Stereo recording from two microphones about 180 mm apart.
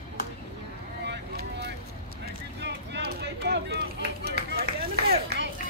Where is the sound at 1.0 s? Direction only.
70° right (ahead or behind).